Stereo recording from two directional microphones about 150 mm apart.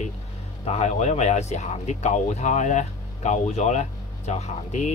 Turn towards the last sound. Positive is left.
turn(degrees=50)  # may be behind; listen again after turning